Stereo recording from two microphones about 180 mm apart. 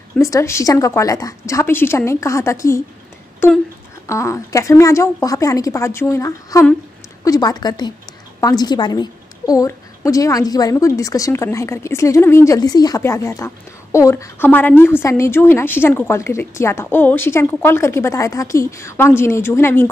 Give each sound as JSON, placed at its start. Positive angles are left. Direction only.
{"t": 0.2, "sound": "a woman's voice", "side_deg": 15}